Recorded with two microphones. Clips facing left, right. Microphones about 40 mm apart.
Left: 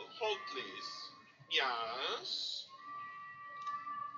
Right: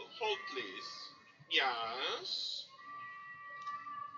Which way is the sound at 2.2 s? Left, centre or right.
Right.